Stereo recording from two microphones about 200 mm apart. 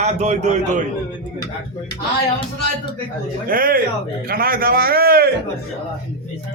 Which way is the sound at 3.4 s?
45° right (ahead or behind).